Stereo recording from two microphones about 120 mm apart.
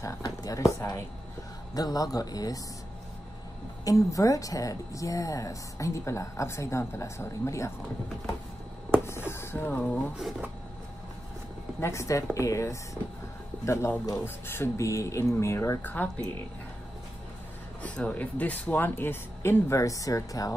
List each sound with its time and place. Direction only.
0.2 s speech: 30° left (ahead or behind)
3.8 s speech: 25° left (ahead or behind)
9.0 s a sound: 20° left (ahead or behind)
11.8 s speech: 25° left (ahead or behind)
17.8 s speech: 10° left (ahead or behind); by 20.5 s 30° left (ahead or behind)